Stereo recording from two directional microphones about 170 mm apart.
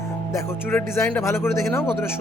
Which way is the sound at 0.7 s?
10° left (ahead or behind).